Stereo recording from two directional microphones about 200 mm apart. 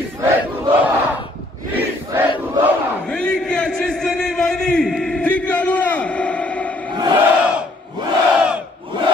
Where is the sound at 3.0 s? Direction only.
5° left (ahead or behind).